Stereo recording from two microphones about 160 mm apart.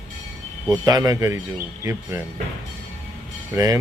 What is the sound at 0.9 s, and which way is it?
Speech, 20° right (ahead or behind).